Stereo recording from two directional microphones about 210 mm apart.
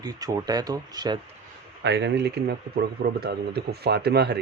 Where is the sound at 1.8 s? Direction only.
55° right (ahead or behind).